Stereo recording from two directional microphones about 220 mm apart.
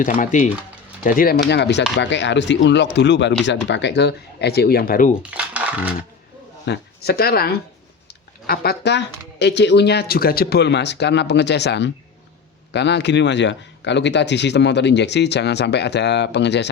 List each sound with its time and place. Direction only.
0.2 s speech: 35° left (ahead or behind)
1.5 s speech: 50° left (ahead or behind)
5.3 s coin: 5° right (ahead or behind)
6.7 s speech: 45° left (ahead or behind)